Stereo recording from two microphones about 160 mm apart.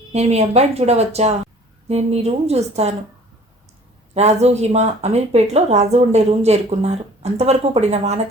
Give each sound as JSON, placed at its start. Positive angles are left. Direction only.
{"t": 0.1, "sound": "a woman's voice", "side_deg": -40}
{"t": 4.1, "sound": "speech", "side_deg": -45}